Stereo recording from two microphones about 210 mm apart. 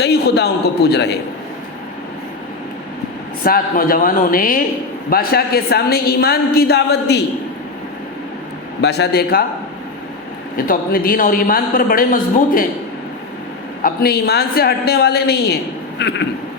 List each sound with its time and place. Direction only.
0.0 s a woman's voice: 50° left (ahead or behind)
3.4 s a woman's voice: 45° left (ahead or behind)
8.8 s a woman's voice: 50° left (ahead or behind)
10.7 s a woman's voice: 45° left (ahead or behind)
13.8 s a woman's voice: 50° left (ahead or behind)